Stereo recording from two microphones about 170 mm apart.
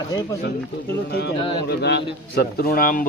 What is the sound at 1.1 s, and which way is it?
A man's voice, 70° left (ahead or behind).